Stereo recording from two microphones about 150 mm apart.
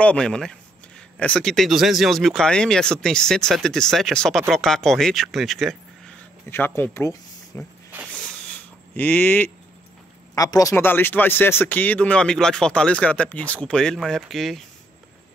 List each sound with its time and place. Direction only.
0.0 s speech: 5° left (ahead or behind)
6.5 s speech: 15° left (ahead or behind)
8.1 s a sound: 5° left (ahead or behind)
10.3 s speech: 25° left (ahead or behind); by 14.6 s centre (ahead or behind)